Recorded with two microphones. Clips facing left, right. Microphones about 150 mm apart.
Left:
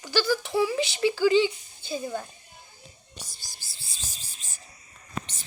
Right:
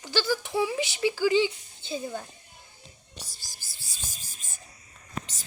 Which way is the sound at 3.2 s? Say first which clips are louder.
Even; 35° right (ahead or behind).